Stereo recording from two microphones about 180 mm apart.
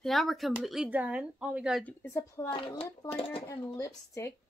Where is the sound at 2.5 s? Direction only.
30° left (ahead or behind).